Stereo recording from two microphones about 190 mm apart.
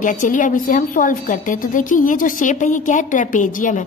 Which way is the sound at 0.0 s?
45° left (ahead or behind).